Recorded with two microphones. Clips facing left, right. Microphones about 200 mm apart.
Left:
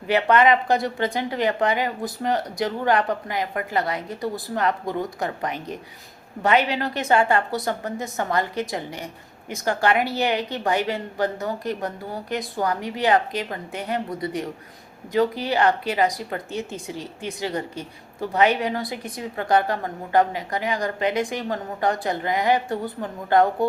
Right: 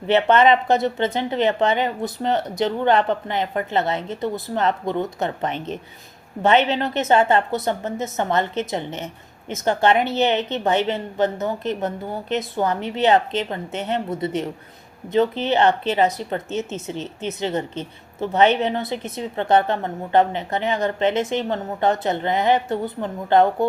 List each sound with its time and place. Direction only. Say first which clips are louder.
0.1 s speech: right 2 dB; 25° right (ahead or behind)